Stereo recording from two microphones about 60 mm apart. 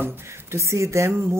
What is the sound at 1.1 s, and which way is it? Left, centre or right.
Speech, right.